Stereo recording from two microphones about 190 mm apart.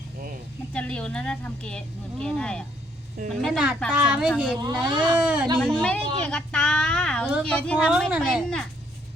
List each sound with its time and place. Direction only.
0.7 s speech: 5° left (ahead or behind)
4.6 s speech: 25° right (ahead or behind)
5.1 s speech: 5° right (ahead or behind)
5.5 s speech: 5° left (ahead or behind)